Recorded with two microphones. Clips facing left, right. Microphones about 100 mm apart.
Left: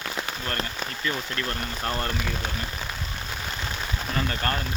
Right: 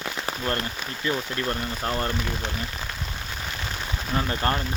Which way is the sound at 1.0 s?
20° right (ahead or behind).